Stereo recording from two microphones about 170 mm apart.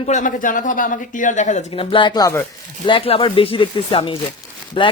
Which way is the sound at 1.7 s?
30° left (ahead or behind).